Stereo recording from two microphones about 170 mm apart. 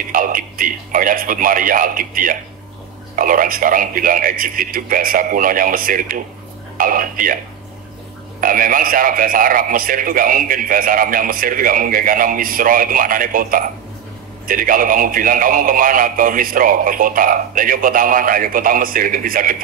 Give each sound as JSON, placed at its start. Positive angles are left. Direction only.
{"t": 0.1, "sound": "a man's voice", "side_deg": -55}
{"t": 8.4, "sound": "a man's voice", "side_deg": -55}